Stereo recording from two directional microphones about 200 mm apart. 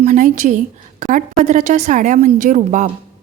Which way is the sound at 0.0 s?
40° right (ahead or behind).